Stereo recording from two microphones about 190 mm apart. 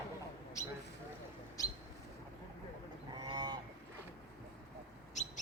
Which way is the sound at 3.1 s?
20° right (ahead or behind).